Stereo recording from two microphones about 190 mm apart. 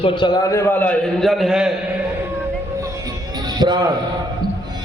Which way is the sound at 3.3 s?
20° right (ahead or behind).